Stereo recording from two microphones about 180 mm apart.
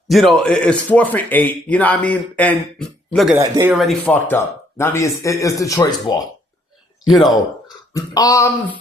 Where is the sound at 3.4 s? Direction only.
15° right (ahead or behind).